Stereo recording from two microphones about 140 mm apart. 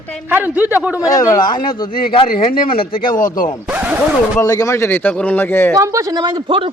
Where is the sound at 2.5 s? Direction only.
90° left.